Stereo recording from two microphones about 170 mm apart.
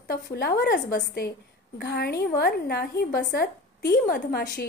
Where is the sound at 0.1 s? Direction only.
65° left (ahead or behind).